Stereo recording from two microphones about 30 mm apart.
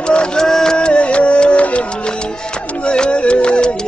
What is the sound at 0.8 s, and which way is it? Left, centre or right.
Music, left.